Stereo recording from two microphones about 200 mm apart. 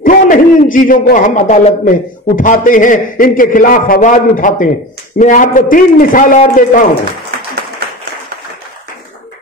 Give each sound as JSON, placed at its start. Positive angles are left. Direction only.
{"t": 0.0, "sound": "a man's voice", "side_deg": 40}